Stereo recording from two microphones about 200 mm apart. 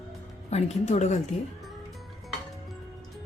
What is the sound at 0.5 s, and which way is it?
Speech, 35° left (ahead or behind).